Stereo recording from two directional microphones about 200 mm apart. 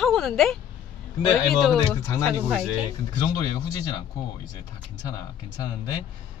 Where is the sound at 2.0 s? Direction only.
15° left (ahead or behind).